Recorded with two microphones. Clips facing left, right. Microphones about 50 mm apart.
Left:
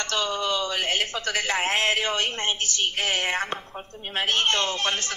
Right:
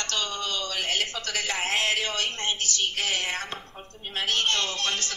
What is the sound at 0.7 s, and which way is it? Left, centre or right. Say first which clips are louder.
Speech: left 2 dB; left.